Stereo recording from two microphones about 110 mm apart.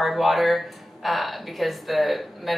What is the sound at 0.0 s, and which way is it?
Speech, centre (ahead or behind).